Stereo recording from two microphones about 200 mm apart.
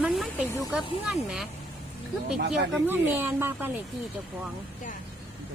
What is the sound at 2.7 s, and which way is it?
Speech, 10° right (ahead or behind).